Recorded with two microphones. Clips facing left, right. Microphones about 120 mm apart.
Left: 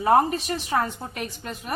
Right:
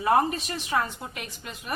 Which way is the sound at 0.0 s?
35° left (ahead or behind).